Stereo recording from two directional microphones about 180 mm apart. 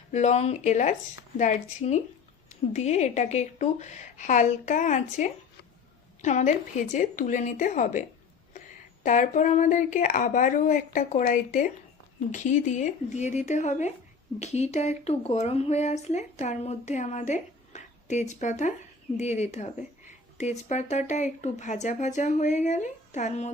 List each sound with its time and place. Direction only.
0.1 s speech: 40° left (ahead or behind)
9.0 s speech: 45° left (ahead or behind)